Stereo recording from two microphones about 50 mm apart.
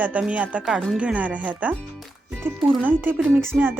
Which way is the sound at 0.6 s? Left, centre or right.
Centre.